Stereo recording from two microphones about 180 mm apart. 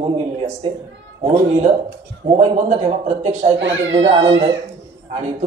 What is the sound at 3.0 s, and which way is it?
Speech, 40° right (ahead or behind).